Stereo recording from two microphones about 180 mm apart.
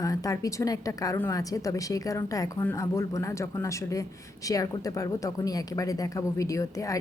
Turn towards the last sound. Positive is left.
turn(degrees=15)  # may be behind; listen again after turning